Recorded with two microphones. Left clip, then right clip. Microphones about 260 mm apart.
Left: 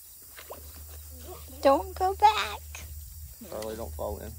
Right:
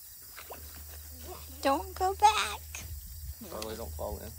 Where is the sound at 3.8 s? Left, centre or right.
Left.